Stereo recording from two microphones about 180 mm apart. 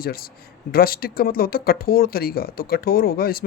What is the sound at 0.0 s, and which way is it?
Speech, 55° left (ahead or behind).